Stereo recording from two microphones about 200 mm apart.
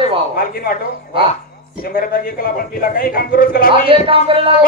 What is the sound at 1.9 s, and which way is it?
A man's voice, 45° left (ahead or behind).